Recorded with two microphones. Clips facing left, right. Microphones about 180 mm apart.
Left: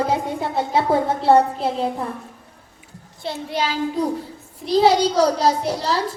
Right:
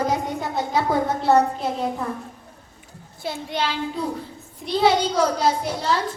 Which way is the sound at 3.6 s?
40° left (ahead or behind).